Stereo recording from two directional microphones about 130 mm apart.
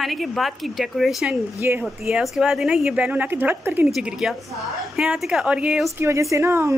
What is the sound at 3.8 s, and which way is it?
A woman's voice, 5° right (ahead or behind).